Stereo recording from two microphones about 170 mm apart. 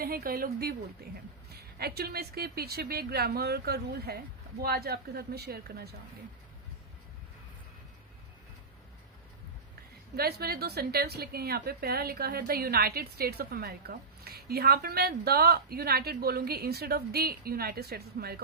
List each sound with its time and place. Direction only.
0.0 s a woman's voice: 60° right (ahead or behind)
10.2 s a woman's voice: 65° right (ahead or behind)